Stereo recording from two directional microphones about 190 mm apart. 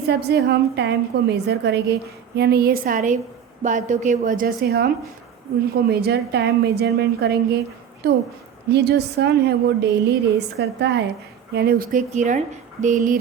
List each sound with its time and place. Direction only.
0.1 s a woman's voice: 60° right (ahead or behind); by 13.1 s 45° right (ahead or behind)